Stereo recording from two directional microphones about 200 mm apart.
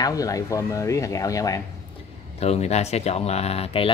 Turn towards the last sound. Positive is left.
turn(degrees=30)  # may be behind; listen again after turning